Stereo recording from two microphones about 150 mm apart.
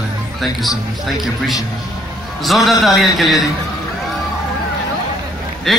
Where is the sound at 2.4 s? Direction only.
Centre (ahead or behind).